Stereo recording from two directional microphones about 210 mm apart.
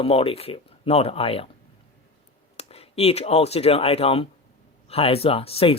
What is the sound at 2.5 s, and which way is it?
Speech, 30° left (ahead or behind).